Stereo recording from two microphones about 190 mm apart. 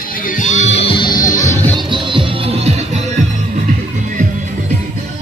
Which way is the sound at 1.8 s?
25° right (ahead or behind).